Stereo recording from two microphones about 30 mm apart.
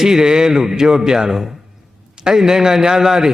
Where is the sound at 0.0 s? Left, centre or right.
Centre.